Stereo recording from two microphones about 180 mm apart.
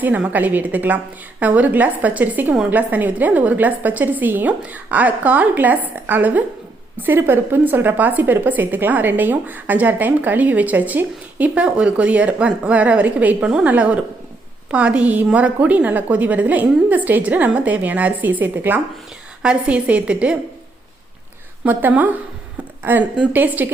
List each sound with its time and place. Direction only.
0.0 s a woman's voice: 10° right (ahead or behind)
21.6 s a woman's voice: 10° right (ahead or behind)